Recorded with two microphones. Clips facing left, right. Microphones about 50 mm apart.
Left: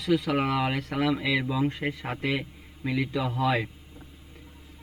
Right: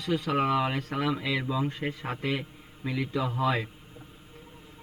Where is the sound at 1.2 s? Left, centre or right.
Left.